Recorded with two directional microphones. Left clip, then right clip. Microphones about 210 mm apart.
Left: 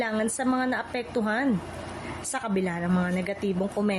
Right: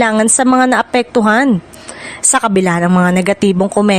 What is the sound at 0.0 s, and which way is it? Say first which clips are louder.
Speech: right 16 dB; 50° right (ahead or behind).